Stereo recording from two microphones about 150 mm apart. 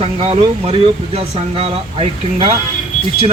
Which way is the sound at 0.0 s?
40° right (ahead or behind).